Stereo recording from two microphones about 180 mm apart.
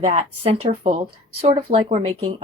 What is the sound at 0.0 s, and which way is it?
Speech, 35° right (ahead or behind).